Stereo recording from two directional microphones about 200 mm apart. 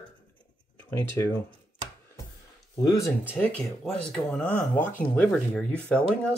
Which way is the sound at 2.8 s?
15° left (ahead or behind).